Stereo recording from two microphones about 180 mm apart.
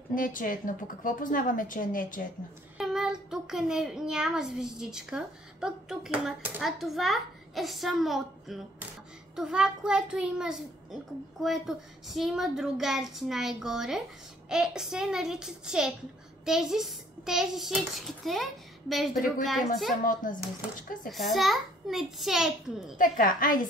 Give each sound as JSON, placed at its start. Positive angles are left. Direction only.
{"t": 0.1, "sound": "a woman's voice", "side_deg": 50}
{"t": 2.8, "sound": "a child's voice", "side_deg": -5}
{"t": 21.1, "sound": "a child's voice", "side_deg": 0}
{"t": 22.9, "sound": "a woman's voice", "side_deg": 50}